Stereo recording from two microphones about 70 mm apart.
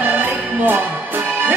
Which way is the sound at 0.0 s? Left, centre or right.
Right.